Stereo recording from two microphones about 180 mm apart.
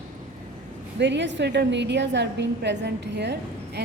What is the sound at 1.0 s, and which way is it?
A woman's voice, 80° right.